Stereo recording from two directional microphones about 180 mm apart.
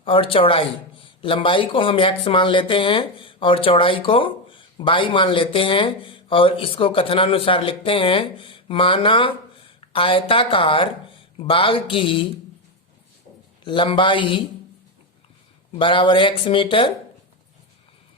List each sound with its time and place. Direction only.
0.0 s speech: 30° left (ahead or behind)
13.7 s speech: 25° left (ahead or behind)
15.7 s speech: 30° left (ahead or behind)